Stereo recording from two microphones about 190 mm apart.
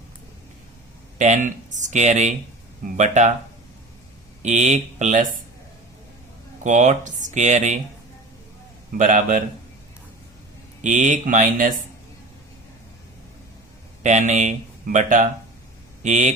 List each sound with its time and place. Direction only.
1.2 s speech: 40° right (ahead or behind)
4.4 s speech: 40° right (ahead or behind)
6.7 s speech: 40° right (ahead or behind)
9.0 s a man's voice: 45° right (ahead or behind)
10.8 s speech: 40° right (ahead or behind)
14.0 s speech: 40° right (ahead or behind)